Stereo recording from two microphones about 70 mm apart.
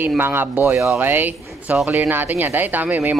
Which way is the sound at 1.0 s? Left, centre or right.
Right.